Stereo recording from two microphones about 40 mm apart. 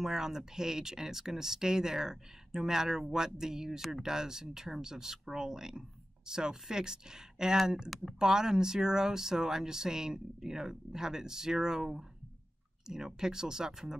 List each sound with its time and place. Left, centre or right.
0.0 s speech: centre